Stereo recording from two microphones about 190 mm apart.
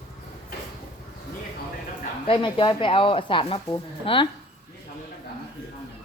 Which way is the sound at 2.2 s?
25° left (ahead or behind).